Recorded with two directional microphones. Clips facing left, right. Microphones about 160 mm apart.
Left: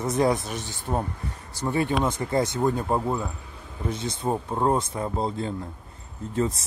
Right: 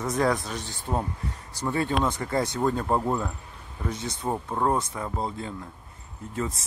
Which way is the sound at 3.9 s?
25° left (ahead or behind).